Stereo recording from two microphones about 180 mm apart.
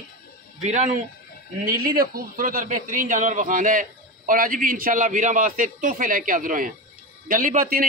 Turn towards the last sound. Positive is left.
turn(degrees=-50)  # may be behind; listen again after turning